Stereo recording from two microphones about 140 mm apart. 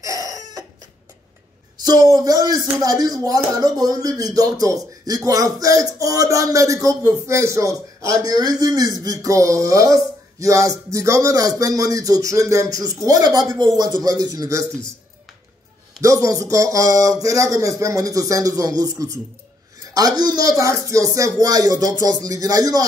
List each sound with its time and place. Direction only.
0.0 s chicken: 25° right (ahead or behind)
1.8 s speech: 25° right (ahead or behind)
16.0 s speech: 25° right (ahead or behind)